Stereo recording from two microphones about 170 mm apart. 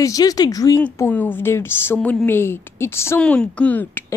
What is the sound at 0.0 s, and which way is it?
A woman's voice, 20° left (ahead or behind).